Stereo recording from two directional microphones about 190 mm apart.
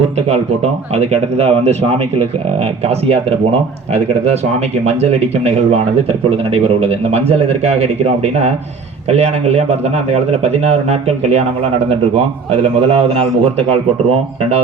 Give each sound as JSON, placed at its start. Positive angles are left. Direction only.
{"t": 0.3, "sound": "a man's voice", "side_deg": -35}
{"t": 4.9, "sound": "a man's voice", "side_deg": -35}